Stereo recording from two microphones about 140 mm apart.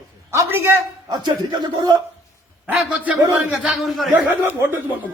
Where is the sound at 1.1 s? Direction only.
30° right (ahead or behind).